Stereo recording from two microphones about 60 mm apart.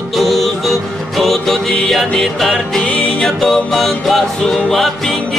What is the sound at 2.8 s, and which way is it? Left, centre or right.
Music, centre.